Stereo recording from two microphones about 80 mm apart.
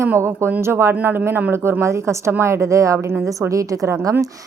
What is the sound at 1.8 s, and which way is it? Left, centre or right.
A woman's voice, right.